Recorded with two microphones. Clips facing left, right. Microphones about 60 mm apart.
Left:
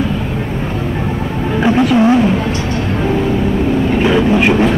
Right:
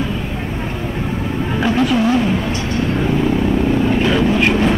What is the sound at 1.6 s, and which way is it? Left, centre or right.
Music, centre.